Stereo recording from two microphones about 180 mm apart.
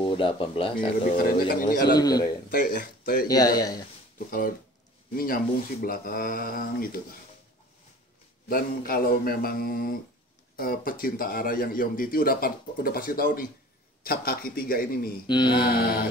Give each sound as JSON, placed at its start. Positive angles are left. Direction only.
{"t": 0.0, "sound": "speech", "side_deg": 30}
{"t": 0.7, "sound": "speech", "side_deg": 50}
{"t": 2.0, "sound": "a man's voice", "side_deg": 20}
{"t": 2.5, "sound": "speech", "side_deg": 50}
{"t": 3.3, "sound": "a man's voice", "side_deg": 20}
{"t": 5.1, "sound": "speech", "side_deg": 55}
{"t": 8.5, "sound": "mantra", "side_deg": 55}
{"t": 10.5, "sound": "speech", "side_deg": 55}
{"t": 14.0, "sound": "mantra", "side_deg": 55}
{"t": 15.2, "sound": "a man's voice", "side_deg": 25}
{"t": 15.6, "sound": "mantra", "side_deg": 55}